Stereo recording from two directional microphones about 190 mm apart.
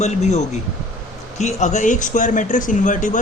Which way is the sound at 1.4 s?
35° left (ahead or behind).